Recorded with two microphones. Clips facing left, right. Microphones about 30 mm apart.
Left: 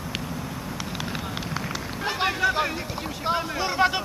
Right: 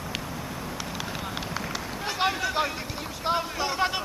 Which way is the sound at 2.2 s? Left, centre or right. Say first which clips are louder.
Left 2 dB; centre.